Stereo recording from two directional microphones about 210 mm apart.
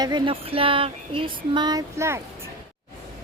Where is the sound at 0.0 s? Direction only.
25° right (ahead or behind).